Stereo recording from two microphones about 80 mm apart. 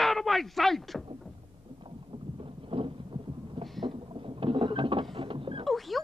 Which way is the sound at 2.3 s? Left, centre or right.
Right.